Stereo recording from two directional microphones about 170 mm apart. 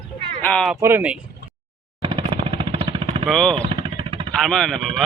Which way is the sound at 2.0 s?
30° right (ahead or behind).